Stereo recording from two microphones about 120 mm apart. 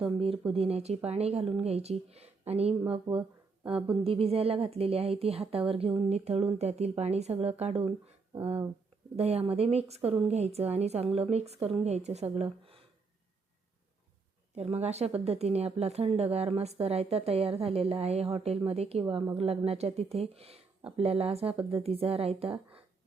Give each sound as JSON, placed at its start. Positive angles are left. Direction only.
{"t": 0.0, "sound": "speech", "side_deg": -50}
{"t": 9.1, "sound": "speech", "side_deg": -60}
{"t": 14.5, "sound": "speech", "side_deg": -60}